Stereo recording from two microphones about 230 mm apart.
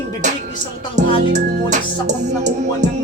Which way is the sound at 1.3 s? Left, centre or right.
Right.